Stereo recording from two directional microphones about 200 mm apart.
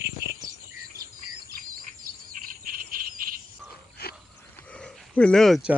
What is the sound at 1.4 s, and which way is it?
Insect, 45° right (ahead or behind).